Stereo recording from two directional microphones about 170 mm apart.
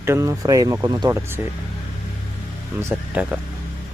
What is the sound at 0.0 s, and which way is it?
Speech, 15° right (ahead or behind).